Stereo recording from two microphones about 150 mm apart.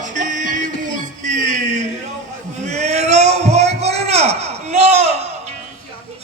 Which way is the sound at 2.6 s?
50° right (ahead or behind).